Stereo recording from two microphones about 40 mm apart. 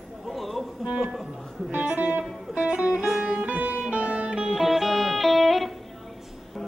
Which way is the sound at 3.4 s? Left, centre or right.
Right.